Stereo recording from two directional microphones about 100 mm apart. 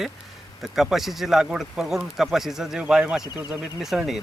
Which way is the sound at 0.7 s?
5° right (ahead or behind).